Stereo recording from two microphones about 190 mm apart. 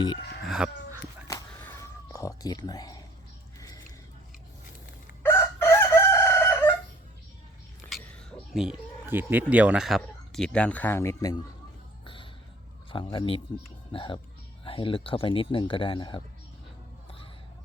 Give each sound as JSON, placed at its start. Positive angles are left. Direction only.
{"t": 0.4, "sound": "chicken", "side_deg": 0}
{"t": 1.3, "sound": "cat", "side_deg": 15}
{"t": 5.2, "sound": "chicken", "side_deg": 10}
{"t": 7.9, "sound": "a sound", "side_deg": 0}
{"t": 9.5, "sound": "speech", "side_deg": -5}
{"t": 12.0, "sound": "music", "side_deg": 25}
{"t": 12.9, "sound": "speech", "side_deg": 25}